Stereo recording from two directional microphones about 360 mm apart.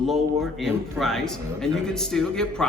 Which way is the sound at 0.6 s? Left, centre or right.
Centre.